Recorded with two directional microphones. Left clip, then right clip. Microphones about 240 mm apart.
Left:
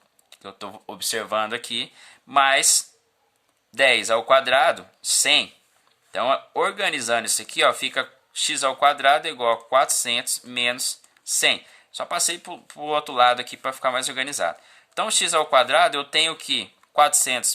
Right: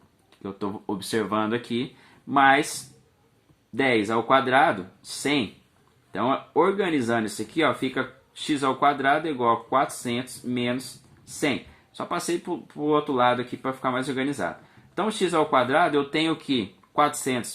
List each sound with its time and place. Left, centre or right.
0.3 s speech: left
3.8 s speech: left
11.9 s speech: left